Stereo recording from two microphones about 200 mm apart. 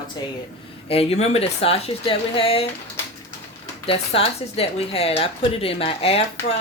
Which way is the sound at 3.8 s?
30° left (ahead or behind).